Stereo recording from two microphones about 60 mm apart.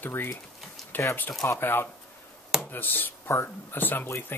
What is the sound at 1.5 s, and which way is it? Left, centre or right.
Speech, left.